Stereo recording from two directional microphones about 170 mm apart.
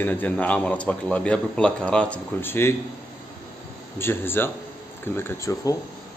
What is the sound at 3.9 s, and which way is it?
A man's voice, 15° left (ahead or behind).